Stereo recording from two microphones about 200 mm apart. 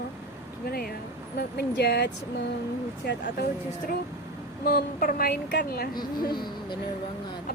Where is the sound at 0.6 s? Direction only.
50° left (ahead or behind).